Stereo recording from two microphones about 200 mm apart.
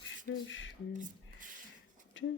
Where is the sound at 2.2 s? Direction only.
70° left (ahead or behind).